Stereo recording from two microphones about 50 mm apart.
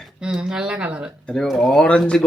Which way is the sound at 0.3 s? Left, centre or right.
Centre.